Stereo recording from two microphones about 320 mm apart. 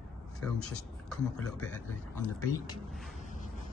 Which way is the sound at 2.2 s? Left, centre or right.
Centre.